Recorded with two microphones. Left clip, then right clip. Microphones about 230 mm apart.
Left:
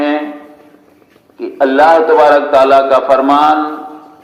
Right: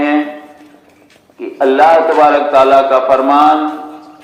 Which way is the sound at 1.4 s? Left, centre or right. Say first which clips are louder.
Even; left.